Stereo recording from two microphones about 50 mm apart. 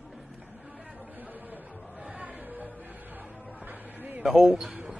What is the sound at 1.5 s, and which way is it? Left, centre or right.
Chatter, right.